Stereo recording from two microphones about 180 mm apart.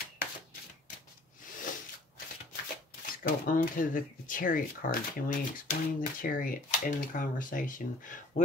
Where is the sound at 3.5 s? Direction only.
50° left (ahead or behind).